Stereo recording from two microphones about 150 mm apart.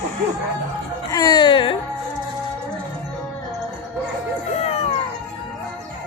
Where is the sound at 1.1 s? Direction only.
25° left (ahead or behind).